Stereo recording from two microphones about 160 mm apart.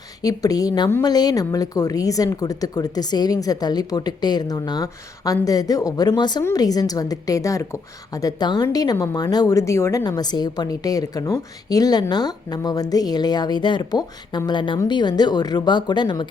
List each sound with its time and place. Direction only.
0.2 s a woman's voice: 25° left (ahead or behind)